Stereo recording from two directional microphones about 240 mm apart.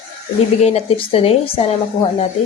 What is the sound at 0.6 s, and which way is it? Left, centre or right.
A woman's voice, left.